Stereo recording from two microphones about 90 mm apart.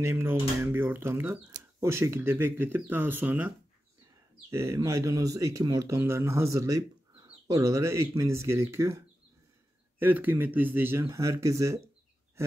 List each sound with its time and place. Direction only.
0.0 s speech: 30° right (ahead or behind)
4.5 s speech: 30° right (ahead or behind)
5.9 s speech: 30° right (ahead or behind)
9.9 s speech: 20° right (ahead or behind); by 11.8 s 35° right (ahead or behind)